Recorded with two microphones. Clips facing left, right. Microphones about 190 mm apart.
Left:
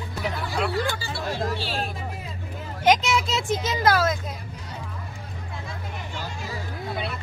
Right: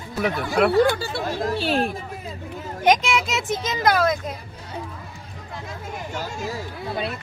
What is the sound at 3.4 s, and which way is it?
Speech, 20° right (ahead or behind).